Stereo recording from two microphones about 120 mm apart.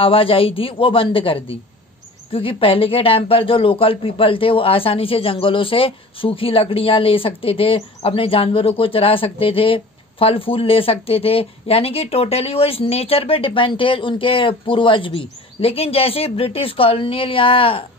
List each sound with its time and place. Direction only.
0.0 s speech: 50° left (ahead or behind)